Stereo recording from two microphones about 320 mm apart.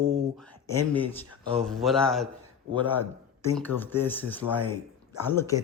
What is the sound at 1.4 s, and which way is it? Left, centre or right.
Speech, centre.